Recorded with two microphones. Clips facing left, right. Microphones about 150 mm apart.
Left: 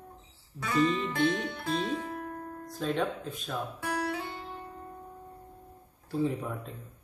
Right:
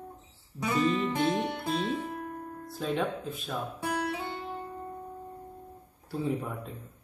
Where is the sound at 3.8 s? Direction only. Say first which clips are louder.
Right 2 dB; 20° right (ahead or behind).